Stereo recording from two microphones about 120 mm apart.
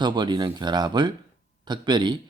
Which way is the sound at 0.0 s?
40° right (ahead or behind).